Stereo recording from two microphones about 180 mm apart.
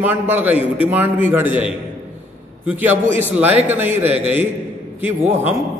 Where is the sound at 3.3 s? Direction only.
10° right (ahead or behind).